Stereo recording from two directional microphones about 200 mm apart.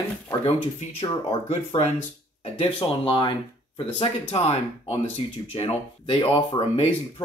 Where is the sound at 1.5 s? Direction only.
35° left (ahead or behind).